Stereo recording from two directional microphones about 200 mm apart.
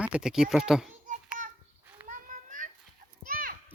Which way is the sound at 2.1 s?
40° right (ahead or behind).